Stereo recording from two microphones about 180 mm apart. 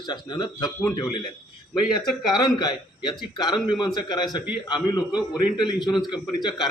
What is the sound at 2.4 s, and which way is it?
A man's voice, 25° left (ahead or behind).